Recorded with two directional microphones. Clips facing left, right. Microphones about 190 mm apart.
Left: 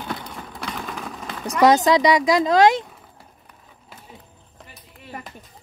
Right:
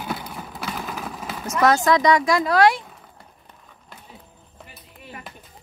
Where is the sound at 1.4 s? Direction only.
15° left (ahead or behind).